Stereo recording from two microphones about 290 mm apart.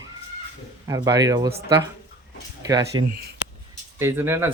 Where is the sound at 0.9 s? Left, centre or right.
Centre.